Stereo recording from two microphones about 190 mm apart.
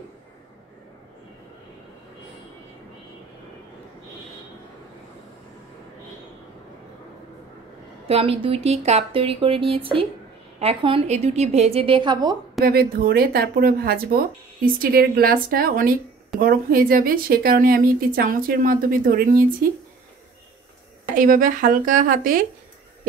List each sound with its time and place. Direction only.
8.1 s a woman's voice: 30° right (ahead or behind)
12.6 s a woman's voice: 50° right (ahead or behind)
21.1 s a woman's voice: 45° right (ahead or behind)